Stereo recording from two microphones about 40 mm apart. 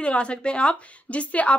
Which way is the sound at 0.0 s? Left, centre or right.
Left.